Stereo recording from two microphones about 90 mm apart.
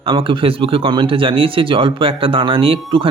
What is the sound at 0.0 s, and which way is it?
Speech, 80° right.